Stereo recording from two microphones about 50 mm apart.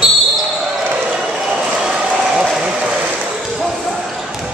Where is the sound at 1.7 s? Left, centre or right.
Centre.